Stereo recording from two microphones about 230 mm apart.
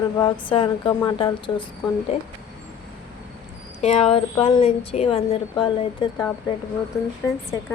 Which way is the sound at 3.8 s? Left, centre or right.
Left.